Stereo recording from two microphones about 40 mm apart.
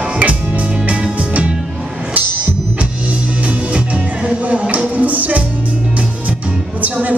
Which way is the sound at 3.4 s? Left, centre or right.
Right.